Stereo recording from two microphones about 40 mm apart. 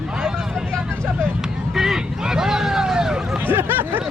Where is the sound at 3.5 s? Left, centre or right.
Right.